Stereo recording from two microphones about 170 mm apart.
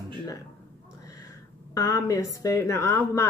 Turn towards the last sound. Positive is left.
turn(degrees=15)  # may be behind; listen again after turning